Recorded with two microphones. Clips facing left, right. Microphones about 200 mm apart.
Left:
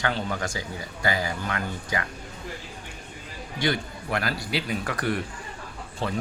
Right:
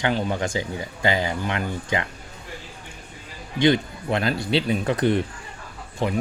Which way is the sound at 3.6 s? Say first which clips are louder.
Right 8 dB; 20° right (ahead or behind).